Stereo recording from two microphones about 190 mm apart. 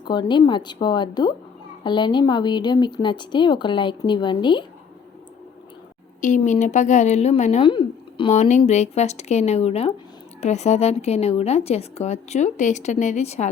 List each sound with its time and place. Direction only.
0.0 s speech: 25° left (ahead or behind)
6.2 s a woman's voice: 40° left (ahead or behind)